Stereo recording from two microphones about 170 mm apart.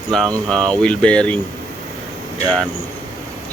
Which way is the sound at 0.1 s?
5° left (ahead or behind).